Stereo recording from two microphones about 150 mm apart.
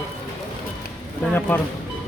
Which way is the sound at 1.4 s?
10° left (ahead or behind).